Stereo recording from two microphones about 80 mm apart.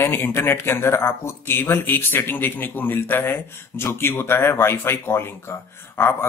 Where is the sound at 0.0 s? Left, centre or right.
Left.